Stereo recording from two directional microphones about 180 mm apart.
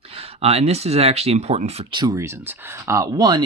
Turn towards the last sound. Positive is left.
turn(degrees=-20)  # may be behind; listen again after turning